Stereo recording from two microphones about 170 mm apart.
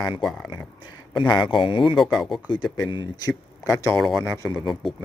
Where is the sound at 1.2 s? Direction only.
25° left (ahead or behind).